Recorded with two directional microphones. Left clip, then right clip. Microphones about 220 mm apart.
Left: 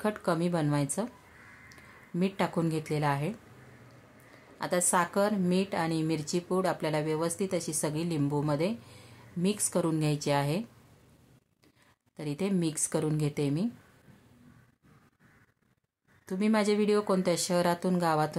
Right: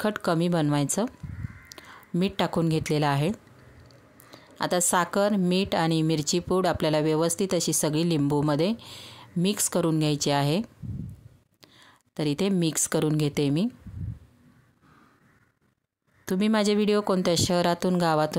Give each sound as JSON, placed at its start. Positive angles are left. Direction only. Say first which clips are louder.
{"t": 0.0, "sound": "speech", "louder": "right 4 dB", "side_deg": -40}
{"t": 1.7, "sound": "whispering", "louder": "right 7 dB", "side_deg": -40}
{"t": 2.1, "sound": "speech", "louder": "right 4 dB", "side_deg": -40}
{"t": 4.6, "sound": "speech", "louder": "right 4 dB", "side_deg": -40}
{"t": 12.2, "sound": "speech", "louder": "right 6 dB", "side_deg": -40}
{"t": 16.3, "sound": "speech", "louder": "right 4 dB", "side_deg": -40}